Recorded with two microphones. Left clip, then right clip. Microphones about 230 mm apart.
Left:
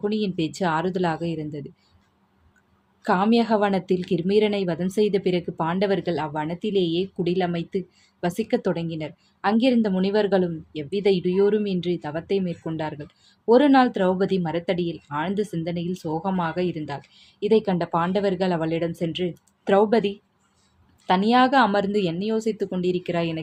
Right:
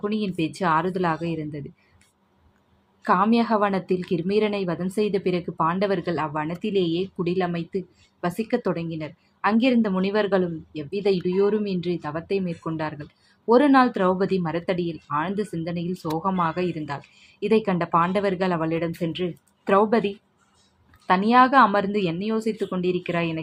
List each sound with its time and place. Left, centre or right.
0.0 s a woman's voice: centre
3.0 s a woman's voice: centre